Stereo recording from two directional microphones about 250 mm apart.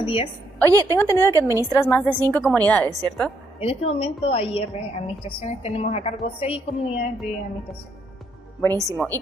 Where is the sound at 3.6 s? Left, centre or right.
Left.